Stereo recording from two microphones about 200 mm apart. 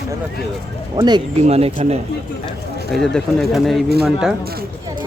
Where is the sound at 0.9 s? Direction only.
20° right (ahead or behind).